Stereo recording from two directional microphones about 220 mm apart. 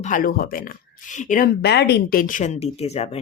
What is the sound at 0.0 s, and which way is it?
Speech, 40° left (ahead or behind).